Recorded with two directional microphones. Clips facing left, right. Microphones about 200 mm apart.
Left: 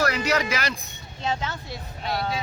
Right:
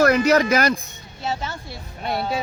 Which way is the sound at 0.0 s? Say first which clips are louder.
Right 8 dB; 50° right (ahead or behind).